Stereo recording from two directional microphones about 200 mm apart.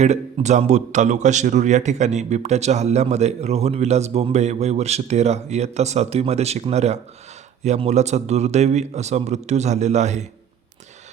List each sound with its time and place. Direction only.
0.0 s a man's voice: 35° right (ahead or behind)